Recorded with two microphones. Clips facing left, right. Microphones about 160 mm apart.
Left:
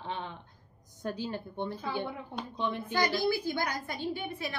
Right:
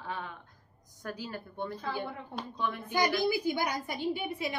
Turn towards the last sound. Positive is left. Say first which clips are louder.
# right 2 dB
turn(degrees=-15)  # may be behind; listen again after turning